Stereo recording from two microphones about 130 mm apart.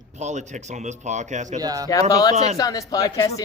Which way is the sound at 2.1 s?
30° left (ahead or behind).